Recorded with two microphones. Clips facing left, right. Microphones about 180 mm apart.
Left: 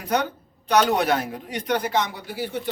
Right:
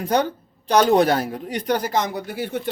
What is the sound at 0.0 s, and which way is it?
A man's voice, 30° right (ahead or behind).